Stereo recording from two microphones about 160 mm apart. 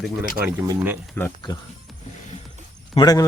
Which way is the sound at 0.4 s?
60° right (ahead or behind).